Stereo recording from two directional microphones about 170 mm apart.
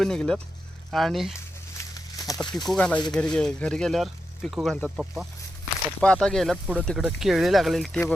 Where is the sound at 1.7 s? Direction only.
20° left (ahead or behind).